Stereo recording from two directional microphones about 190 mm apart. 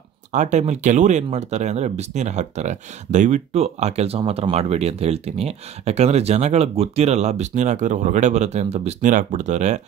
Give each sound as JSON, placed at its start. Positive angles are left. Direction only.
{"t": 0.3, "sound": "speech", "side_deg": -40}